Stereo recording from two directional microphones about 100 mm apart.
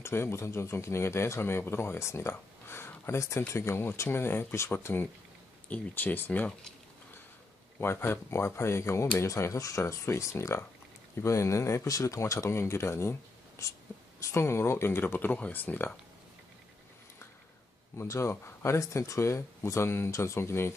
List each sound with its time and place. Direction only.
0.0 s speech: 25° left (ahead or behind)
7.8 s speech: 25° left (ahead or behind)
17.9 s speech: 30° left (ahead or behind)